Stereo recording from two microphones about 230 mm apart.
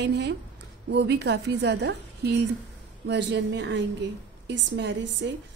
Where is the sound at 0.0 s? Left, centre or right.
Right.